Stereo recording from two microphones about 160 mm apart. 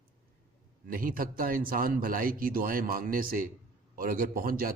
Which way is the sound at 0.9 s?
65° right (ahead or behind).